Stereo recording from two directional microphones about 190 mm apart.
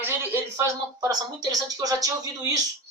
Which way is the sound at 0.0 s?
10° right (ahead or behind).